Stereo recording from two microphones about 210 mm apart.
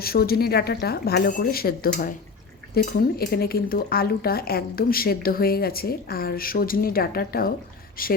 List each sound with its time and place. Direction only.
0.0 s speech: 45° left (ahead or behind)